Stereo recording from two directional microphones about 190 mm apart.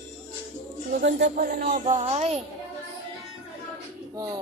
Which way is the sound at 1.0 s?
60° right (ahead or behind).